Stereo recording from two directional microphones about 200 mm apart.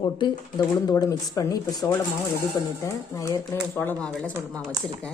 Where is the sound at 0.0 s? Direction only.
25° left (ahead or behind); by 4.4 s 5° left (ahead or behind).